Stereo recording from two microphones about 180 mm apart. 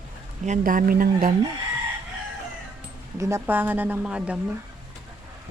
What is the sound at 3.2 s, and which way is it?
Speech, 15° right (ahead or behind).